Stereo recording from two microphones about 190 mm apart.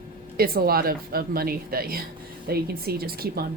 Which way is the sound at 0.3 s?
55° right (ahead or behind).